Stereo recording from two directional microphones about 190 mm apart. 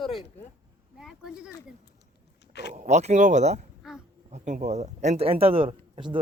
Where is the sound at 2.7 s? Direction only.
35° right (ahead or behind).